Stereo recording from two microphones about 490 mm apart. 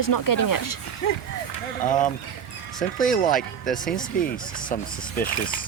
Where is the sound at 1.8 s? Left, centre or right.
Centre.